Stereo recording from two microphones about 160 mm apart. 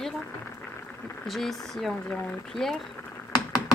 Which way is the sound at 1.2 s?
Centre (ahead or behind).